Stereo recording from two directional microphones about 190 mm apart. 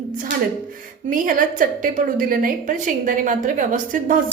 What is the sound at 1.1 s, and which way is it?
A woman's voice, 45° right (ahead or behind).